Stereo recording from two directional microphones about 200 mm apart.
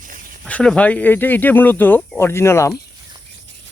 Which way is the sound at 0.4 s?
5° left (ahead or behind).